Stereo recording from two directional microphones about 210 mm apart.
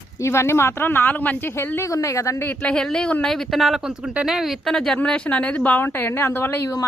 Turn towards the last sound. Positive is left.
turn(degrees=15)  # may be behind; listen again after turning